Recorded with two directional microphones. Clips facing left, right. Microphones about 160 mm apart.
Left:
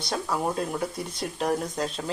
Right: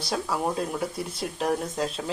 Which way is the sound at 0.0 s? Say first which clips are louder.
Even; centre (ahead or behind).